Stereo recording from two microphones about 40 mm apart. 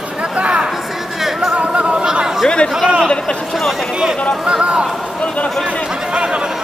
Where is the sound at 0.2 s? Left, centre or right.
Right.